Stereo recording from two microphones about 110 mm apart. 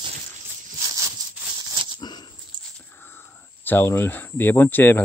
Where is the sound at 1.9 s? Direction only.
40° left (ahead or behind).